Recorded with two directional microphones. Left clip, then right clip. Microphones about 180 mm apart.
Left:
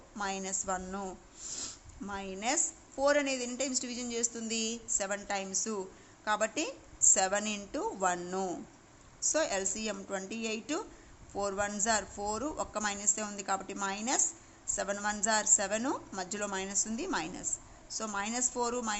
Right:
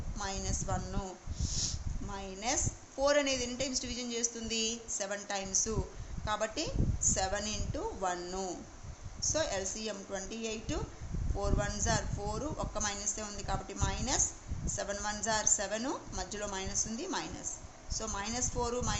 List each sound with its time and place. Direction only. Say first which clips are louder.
0.2 s a woman's voice: left 3 dB; 25° left (ahead or behind)